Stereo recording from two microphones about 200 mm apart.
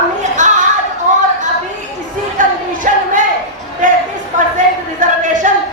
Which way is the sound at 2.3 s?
40° right (ahead or behind).